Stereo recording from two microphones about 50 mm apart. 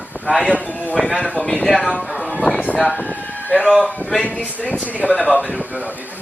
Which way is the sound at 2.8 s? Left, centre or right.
Centre.